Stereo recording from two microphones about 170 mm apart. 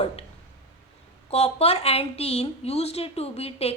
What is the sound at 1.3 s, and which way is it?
A woman's voice, 35° left (ahead or behind).